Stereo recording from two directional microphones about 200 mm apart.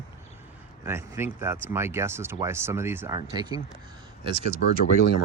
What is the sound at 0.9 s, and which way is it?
Speech, 10° right (ahead or behind).